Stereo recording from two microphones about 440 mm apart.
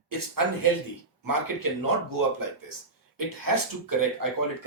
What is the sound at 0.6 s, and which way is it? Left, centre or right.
Speech, right.